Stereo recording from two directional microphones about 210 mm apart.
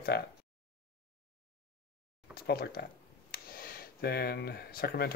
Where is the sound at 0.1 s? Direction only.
50° left (ahead or behind).